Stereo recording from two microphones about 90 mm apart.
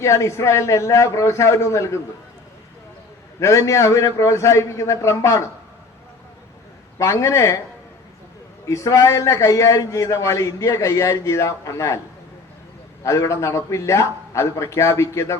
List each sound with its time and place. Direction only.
0.0 s a man's voice: 35° left (ahead or behind)
3.4 s a man's voice: 35° left (ahead or behind)
7.0 s a man's voice: 35° left (ahead or behind)
8.6 s a man's voice: 35° left (ahead or behind)
13.0 s a man's voice: 35° left (ahead or behind)